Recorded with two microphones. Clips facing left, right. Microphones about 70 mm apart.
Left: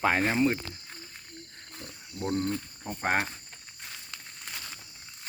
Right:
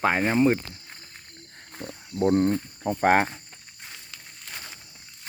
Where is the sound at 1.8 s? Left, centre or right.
Right.